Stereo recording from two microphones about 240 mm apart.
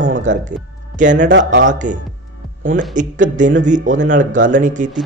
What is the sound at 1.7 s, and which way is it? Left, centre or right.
Speech, right.